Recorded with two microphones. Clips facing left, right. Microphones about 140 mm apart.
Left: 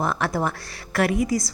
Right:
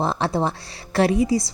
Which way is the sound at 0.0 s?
30° right (ahead or behind).